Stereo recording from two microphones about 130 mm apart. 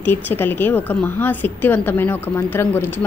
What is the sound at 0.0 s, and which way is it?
A woman's voice, 15° left (ahead or behind).